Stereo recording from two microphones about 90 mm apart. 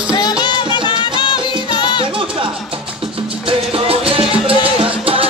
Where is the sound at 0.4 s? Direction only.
60° left (ahead or behind).